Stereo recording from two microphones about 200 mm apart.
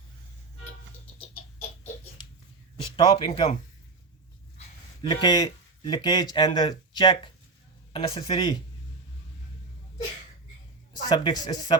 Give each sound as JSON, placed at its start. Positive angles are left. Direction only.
{"t": 2.8, "sound": "a man's voice", "side_deg": 25}
{"t": 5.0, "sound": "speech", "side_deg": 20}
{"t": 11.1, "sound": "speech", "side_deg": 20}